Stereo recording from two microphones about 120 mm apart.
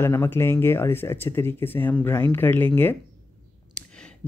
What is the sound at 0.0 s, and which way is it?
Speech, 20° left (ahead or behind).